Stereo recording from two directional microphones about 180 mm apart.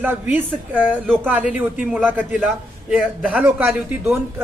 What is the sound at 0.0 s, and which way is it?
A man's voice, 10° right (ahead or behind).